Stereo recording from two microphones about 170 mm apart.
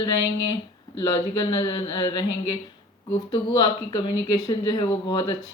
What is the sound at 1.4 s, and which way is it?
Speech, 25° left (ahead or behind).